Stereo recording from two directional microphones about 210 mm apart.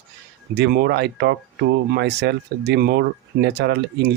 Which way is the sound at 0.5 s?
50° right (ahead or behind).